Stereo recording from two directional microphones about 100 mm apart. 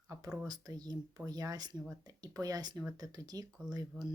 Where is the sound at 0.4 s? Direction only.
40° right (ahead or behind).